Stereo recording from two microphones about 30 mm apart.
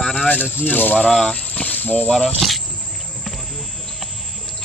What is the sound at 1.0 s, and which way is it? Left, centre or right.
Speech, centre.